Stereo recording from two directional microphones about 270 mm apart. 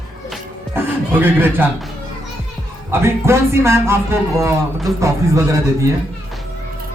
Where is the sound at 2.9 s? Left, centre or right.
Centre.